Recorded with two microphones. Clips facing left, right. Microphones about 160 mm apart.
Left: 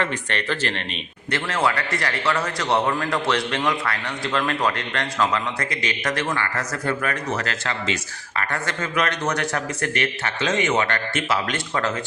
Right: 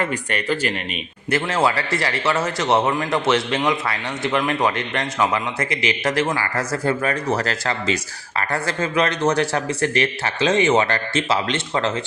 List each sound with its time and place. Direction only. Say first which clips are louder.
0.0 s speech: right 2 dB; 10° right (ahead or behind)
1.3 s a man's voice: right 3 dB; 25° right (ahead or behind)